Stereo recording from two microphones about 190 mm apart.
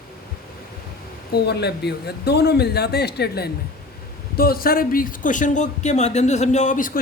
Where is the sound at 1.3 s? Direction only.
60° left (ahead or behind).